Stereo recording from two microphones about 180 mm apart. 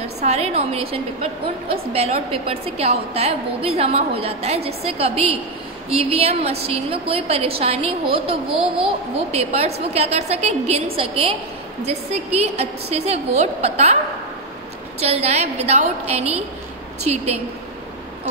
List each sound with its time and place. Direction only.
0.2 s a woman's voice: 35° right (ahead or behind)
15.0 s a woman's voice: 35° right (ahead or behind)